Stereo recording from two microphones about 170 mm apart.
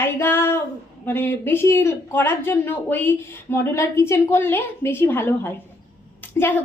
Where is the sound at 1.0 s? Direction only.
10° left (ahead or behind).